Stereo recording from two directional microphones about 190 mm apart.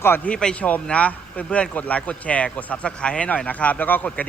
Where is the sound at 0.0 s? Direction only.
10° left (ahead or behind).